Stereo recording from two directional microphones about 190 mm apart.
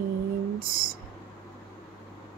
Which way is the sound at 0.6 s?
50° right (ahead or behind).